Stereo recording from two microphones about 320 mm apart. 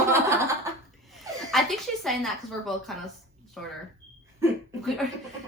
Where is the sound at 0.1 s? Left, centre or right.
Centre.